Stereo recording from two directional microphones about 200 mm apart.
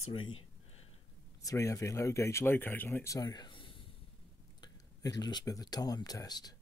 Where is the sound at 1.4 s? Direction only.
15° left (ahead or behind).